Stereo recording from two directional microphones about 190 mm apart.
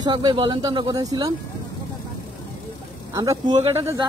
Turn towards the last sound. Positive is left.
turn(degrees=-15)  # may be behind; listen again after turning